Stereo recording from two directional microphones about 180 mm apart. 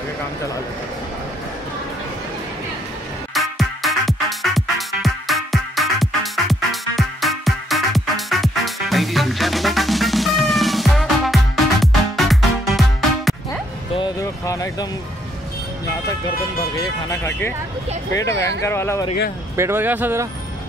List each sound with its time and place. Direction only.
3.3 s music: centre (ahead or behind)
13.9 s a sound: 20° left (ahead or behind)
16.7 s speech: 15° left (ahead or behind)
18.6 s speech: 15° left (ahead or behind)
19.5 s speech: 15° right (ahead or behind)